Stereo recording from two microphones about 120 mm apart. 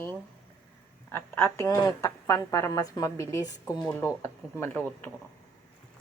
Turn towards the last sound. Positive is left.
turn(degrees=15)  # may be behind; listen again after turning